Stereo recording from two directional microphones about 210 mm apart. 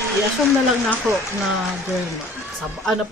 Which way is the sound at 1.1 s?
10° right (ahead or behind).